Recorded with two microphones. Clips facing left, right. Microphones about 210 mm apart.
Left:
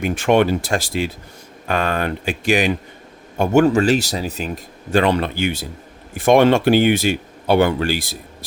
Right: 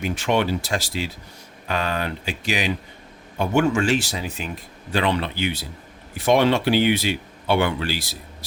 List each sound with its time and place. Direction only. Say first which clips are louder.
0.0 s speech: left 6 dB; 55° left (ahead or behind)